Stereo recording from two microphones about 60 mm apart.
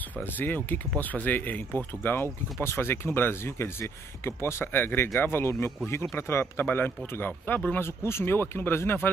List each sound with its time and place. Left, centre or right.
0.4 s speech: left
7.7 s speech: left